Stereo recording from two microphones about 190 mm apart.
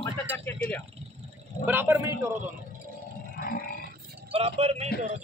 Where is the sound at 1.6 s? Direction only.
15° right (ahead or behind).